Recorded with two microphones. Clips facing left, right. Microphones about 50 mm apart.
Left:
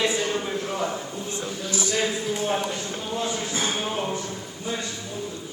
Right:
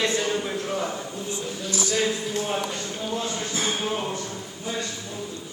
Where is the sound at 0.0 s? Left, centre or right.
Centre.